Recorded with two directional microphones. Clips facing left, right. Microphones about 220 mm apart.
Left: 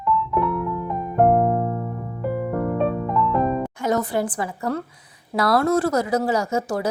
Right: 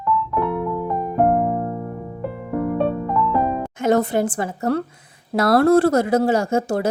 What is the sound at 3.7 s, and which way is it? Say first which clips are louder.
A woman's voice: right 4 dB; 25° right (ahead or behind).